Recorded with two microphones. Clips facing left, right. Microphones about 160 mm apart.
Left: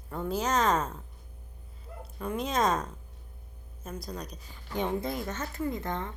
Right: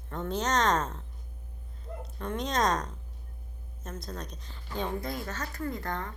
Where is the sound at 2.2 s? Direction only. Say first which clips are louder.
Left 1 dB; 5° left (ahead or behind).